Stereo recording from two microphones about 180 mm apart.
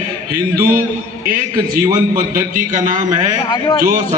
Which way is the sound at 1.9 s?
50° right (ahead or behind).